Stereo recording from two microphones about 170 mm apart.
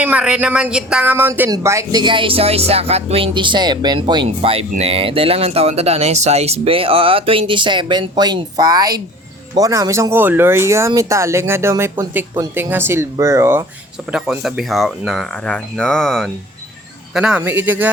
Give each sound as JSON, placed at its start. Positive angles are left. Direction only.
{"t": 0.0, "sound": "speech", "side_deg": -5}
{"t": 14.1, "sound": "speech", "side_deg": 0}